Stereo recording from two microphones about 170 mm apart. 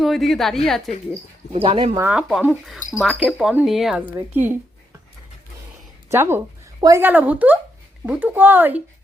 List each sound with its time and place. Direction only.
0.0 s speech: centre (ahead or behind)
1.5 s speech: 35° right (ahead or behind)
2.0 s speech: 10° right (ahead or behind)
6.1 s speech: 15° right (ahead or behind)